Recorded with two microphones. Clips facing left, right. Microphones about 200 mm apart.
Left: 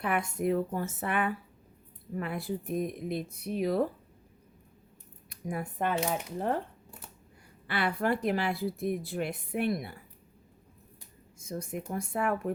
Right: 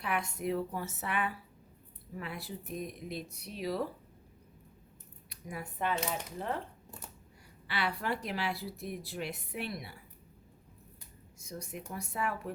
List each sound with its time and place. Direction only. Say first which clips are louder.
0.0 s a woman's voice: left 5 dB; 50° left (ahead or behind)
5.3 s a woman's voice: left 7 dB; 50° left (ahead or behind)
7.7 s a woman's voice: left 6 dB; 50° left (ahead or behind)
11.3 s a woman's voice: left 7 dB; 50° left (ahead or behind)